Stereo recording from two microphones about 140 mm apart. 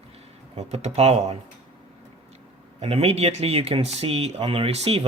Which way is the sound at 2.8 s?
50° right (ahead or behind).